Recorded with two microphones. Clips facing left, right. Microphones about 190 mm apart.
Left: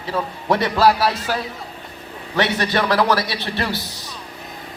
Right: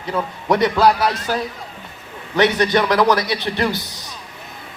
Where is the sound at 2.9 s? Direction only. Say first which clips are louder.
Right 2 dB; 20° right (ahead or behind).